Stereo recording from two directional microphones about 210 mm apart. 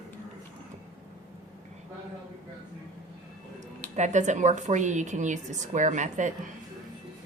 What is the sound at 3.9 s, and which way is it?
A woman's voice, 35° right (ahead or behind).